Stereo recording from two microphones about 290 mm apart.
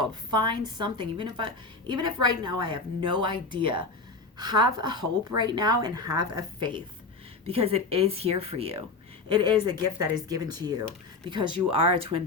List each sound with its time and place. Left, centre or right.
0.0 s a woman's voice: centre